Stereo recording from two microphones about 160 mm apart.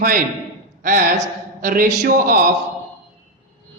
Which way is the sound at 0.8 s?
55° right (ahead or behind).